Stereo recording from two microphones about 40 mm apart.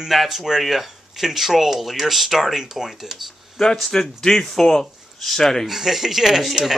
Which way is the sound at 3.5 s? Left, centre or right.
Centre.